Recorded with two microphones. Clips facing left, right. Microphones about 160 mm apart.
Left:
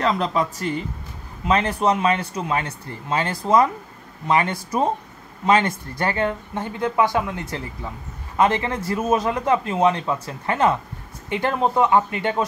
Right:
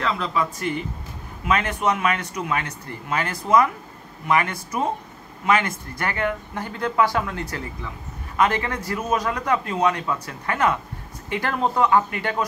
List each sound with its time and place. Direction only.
0.0 s a man's voice: 40° left (ahead or behind); by 12.4 s 25° left (ahead or behind)